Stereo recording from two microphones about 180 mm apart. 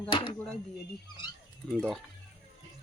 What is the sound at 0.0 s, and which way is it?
Speech, 25° left (ahead or behind).